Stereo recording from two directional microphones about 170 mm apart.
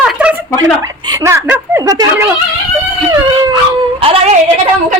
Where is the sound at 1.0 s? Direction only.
20° right (ahead or behind).